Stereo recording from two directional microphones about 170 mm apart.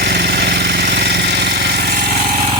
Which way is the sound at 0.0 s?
75° right (ahead or behind).